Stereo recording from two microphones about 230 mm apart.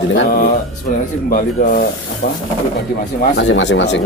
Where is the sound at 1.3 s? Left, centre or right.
Left.